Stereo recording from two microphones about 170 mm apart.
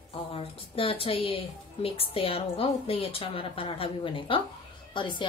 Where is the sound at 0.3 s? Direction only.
35° left (ahead or behind).